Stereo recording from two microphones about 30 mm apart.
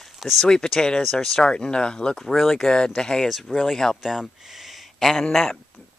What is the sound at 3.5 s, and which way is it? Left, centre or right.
Speech, right.